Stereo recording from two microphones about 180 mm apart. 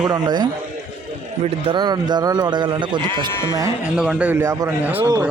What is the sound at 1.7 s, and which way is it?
A man's voice, 25° right (ahead or behind).